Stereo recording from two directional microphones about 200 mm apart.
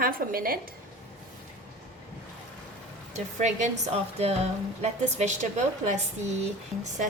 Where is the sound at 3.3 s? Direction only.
35° right (ahead or behind).